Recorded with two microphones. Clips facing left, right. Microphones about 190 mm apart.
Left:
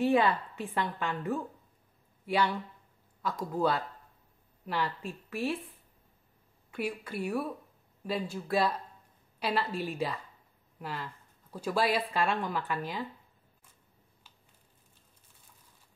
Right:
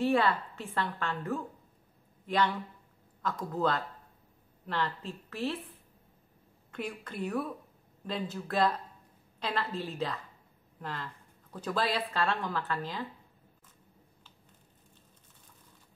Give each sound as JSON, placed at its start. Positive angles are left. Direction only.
{"t": 0.0, "sound": "speech", "side_deg": 15}
{"t": 6.7, "sound": "speech", "side_deg": 10}